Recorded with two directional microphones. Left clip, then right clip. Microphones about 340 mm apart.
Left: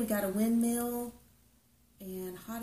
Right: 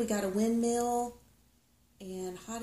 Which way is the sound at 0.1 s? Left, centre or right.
Centre.